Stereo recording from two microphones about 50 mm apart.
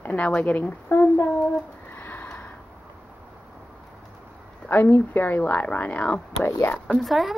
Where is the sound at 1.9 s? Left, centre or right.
Left.